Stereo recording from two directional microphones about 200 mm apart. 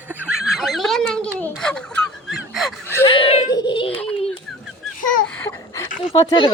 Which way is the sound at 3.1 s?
30° left (ahead or behind).